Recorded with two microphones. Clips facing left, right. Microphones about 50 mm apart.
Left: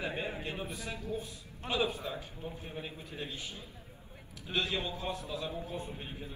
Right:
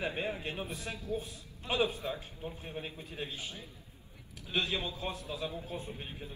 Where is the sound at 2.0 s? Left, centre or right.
Centre.